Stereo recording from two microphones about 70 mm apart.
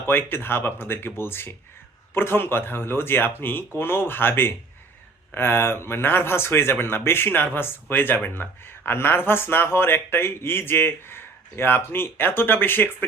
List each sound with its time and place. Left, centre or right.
0.1 s speech: left